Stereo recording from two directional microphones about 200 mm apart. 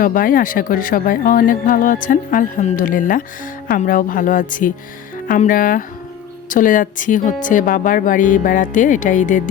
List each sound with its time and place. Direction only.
0.0 s speech: 45° left (ahead or behind)